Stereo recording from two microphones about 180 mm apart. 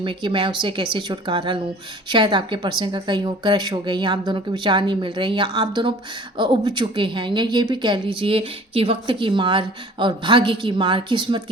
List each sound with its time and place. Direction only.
0.0 s a woman's voice: 30° right (ahead or behind)